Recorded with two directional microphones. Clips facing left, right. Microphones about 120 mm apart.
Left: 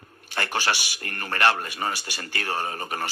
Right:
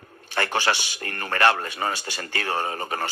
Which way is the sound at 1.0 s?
30° right (ahead or behind).